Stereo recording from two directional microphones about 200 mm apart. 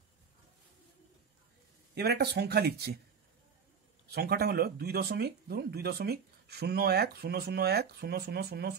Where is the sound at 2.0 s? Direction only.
55° right (ahead or behind).